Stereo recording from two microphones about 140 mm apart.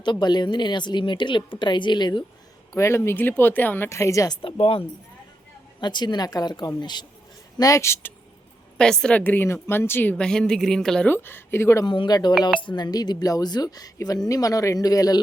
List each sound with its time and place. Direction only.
0.0 s a woman's voice: 30° left (ahead or behind)
2.7 s speech: 20° left (ahead or behind)
4.4 s a woman's voice: 40° left (ahead or behind)
5.8 s a woman's voice: 30° left (ahead or behind)
8.8 s a woman's voice: 5° left (ahead or behind)
11.9 s a woman's voice: 30° left (ahead or behind)